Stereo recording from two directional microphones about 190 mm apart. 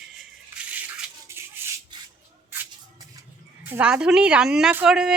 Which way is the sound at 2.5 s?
15° right (ahead or behind).